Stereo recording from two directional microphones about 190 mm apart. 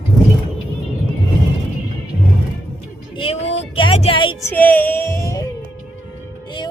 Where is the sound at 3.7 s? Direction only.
30° left (ahead or behind).